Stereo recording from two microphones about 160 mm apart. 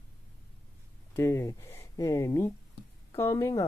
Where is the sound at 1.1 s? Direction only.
15° left (ahead or behind).